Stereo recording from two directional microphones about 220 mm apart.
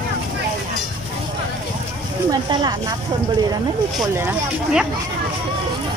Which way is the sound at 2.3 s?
15° right (ahead or behind).